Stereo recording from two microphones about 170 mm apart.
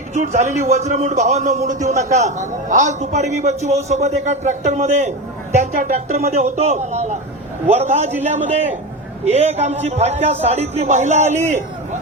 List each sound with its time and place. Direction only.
0.1 s a man's voice: 45° right (ahead or behind)